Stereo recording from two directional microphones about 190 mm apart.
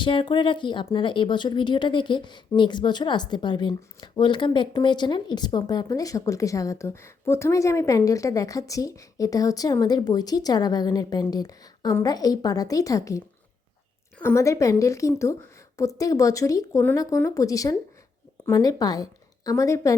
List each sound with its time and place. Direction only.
0.0 s a woman's voice: 25° left (ahead or behind)